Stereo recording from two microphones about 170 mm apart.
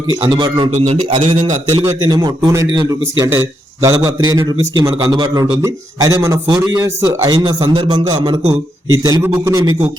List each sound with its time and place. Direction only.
0.2 s a man's voice: 30° right (ahead or behind)
0.7 s a man's voice: 40° right (ahead or behind)
2.0 s a man's voice: 25° right (ahead or behind)
7.3 s a man's voice: 30° right (ahead or behind)
9.0 s a man's voice: 20° right (ahead or behind)